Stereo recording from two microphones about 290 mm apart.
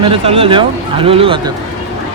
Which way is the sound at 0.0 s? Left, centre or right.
Centre.